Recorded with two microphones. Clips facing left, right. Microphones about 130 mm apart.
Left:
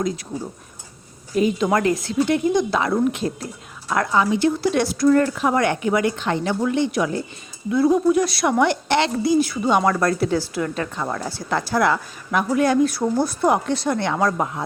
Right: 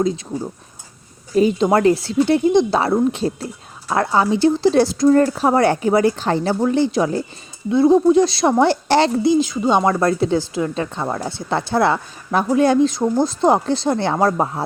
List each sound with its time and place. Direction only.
1.4 s speech: 30° right (ahead or behind)
9.3 s speech: 20° right (ahead or behind)